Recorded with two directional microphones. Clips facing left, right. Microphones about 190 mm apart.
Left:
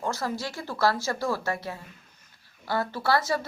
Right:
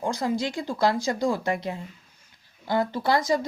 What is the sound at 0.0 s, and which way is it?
Speech, 15° right (ahead or behind).